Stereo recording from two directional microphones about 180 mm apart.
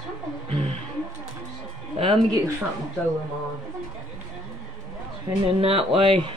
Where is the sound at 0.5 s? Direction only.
30° right (ahead or behind).